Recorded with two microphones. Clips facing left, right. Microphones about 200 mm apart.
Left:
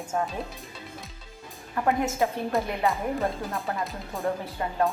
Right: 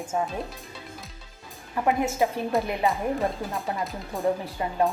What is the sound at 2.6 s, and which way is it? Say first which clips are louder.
A woman's voice: right 1 dB; centre (ahead or behind).